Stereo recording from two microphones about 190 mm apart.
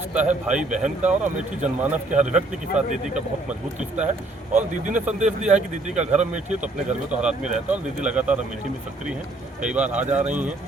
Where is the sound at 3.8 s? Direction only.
40° right (ahead or behind).